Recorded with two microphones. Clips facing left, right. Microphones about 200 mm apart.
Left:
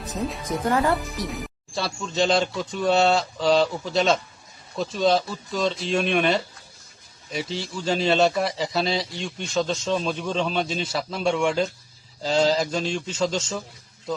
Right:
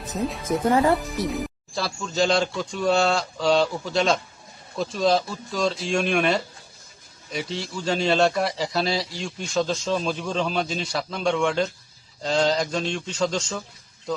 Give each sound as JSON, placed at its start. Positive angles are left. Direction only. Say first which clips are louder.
{"t": 0.7, "sound": "speech", "louder": "right 2 dB", "side_deg": -25}
{"t": 1.3, "sound": "a man's voice", "louder": "right 4 dB", "side_deg": 0}